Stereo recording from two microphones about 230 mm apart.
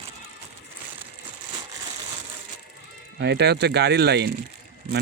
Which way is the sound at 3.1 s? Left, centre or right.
Right.